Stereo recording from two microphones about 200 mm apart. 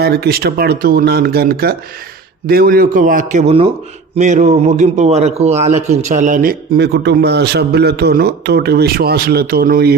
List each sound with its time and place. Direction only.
0.0 s a man's voice: 50° right (ahead or behind)